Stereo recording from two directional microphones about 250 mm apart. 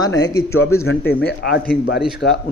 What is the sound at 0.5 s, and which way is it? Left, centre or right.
Speech, left.